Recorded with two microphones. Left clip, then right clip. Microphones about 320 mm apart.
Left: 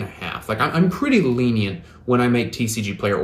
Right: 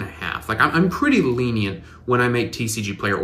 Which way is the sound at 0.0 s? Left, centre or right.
Centre.